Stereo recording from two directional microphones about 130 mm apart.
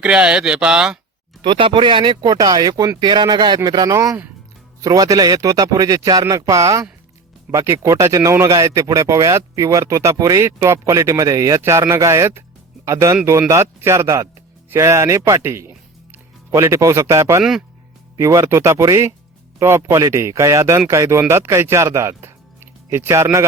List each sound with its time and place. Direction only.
0.0 s speech: 5° right (ahead or behind)
1.4 s speech: 40° right (ahead or behind); by 23.4 s 20° right (ahead or behind)